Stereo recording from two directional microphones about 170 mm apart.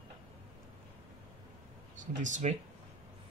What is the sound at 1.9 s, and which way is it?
Speech, 45° right (ahead or behind).